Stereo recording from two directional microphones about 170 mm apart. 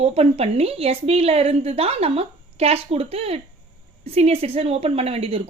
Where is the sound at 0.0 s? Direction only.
35° right (ahead or behind).